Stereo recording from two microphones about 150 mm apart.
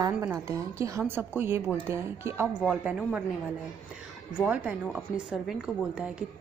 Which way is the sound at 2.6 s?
5° right (ahead or behind).